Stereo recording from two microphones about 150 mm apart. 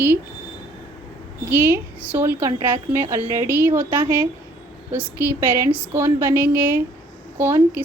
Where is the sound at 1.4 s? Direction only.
10° right (ahead or behind).